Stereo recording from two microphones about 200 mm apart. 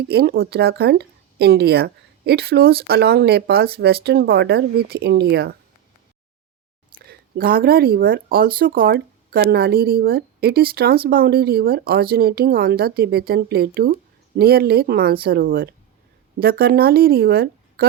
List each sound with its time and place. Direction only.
0.1 s speech: 50° right (ahead or behind)
7.0 s speech: 50° right (ahead or behind)